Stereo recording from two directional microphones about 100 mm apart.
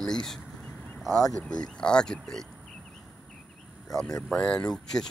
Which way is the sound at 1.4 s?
10° left (ahead or behind).